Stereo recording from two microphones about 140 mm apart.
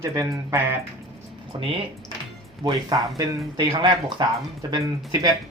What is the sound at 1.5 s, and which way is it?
Speech, 40° right (ahead or behind).